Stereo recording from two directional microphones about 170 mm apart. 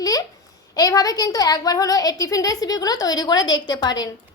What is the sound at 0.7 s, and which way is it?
Child singing, 20° left (ahead or behind).